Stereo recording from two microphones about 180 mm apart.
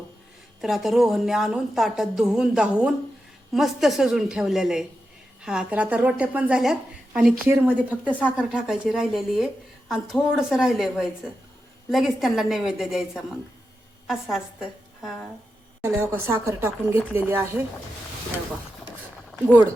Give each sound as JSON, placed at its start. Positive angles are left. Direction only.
{"t": 0.6, "sound": "a woman's voice", "side_deg": 0}
{"t": 15.8, "sound": "a woman's voice", "side_deg": -15}